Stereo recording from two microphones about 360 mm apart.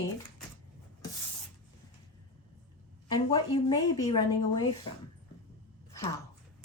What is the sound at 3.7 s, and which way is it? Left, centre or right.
Speech, centre.